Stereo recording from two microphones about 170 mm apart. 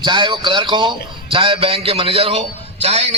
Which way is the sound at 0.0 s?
25° right (ahead or behind).